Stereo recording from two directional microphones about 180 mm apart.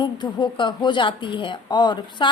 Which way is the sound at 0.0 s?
25° left (ahead or behind).